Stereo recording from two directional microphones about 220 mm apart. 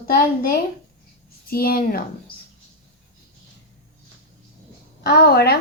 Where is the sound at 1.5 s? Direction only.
45° left (ahead or behind).